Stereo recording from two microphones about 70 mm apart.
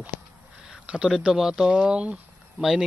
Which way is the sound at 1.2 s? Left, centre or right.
Centre.